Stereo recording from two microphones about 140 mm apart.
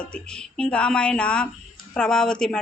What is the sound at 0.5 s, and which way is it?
Speech, 10° left (ahead or behind).